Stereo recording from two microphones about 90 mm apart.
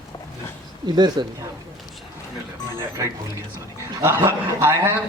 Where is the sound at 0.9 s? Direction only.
50° right (ahead or behind).